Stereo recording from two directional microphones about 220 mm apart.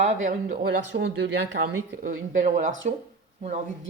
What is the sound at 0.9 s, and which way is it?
Speech, 55° right (ahead or behind).